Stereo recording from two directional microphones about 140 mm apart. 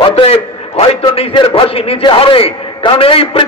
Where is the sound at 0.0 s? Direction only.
45° left (ahead or behind).